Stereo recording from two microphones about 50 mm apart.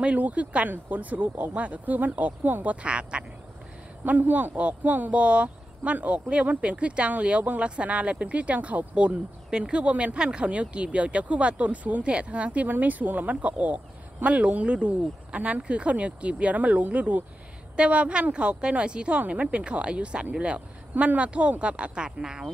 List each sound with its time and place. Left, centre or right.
0.0 s speech: right
4.0 s speech: right; by 22.5 s centre